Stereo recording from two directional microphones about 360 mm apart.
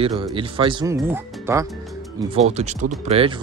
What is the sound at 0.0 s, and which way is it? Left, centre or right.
Speech, centre.